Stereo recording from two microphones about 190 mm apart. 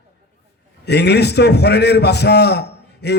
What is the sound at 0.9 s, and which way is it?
A man's voice, 60° left (ahead or behind).